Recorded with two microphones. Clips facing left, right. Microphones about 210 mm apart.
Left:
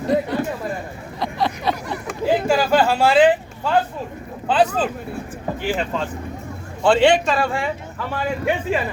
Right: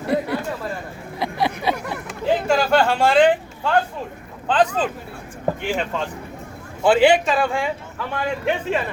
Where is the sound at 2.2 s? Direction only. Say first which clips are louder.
Left 1 dB; 5° left (ahead or behind).